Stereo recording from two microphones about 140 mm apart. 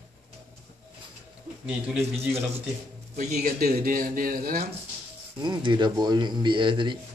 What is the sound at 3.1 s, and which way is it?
Speech, 80° right.